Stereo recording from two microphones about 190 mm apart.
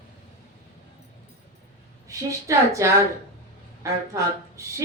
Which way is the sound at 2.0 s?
15° right (ahead or behind).